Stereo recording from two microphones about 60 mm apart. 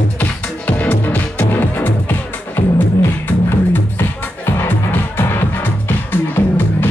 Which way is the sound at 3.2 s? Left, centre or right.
Left.